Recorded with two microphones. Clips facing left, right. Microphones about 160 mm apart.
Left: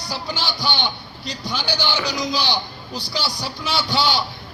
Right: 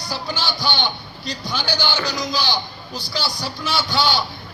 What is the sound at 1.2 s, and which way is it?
Speech, 15° left (ahead or behind).